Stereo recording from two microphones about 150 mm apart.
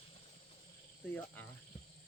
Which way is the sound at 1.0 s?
10° left (ahead or behind).